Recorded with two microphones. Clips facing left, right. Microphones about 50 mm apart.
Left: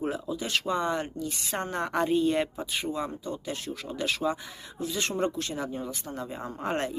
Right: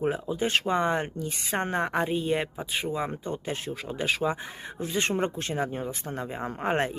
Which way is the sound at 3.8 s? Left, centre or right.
Right.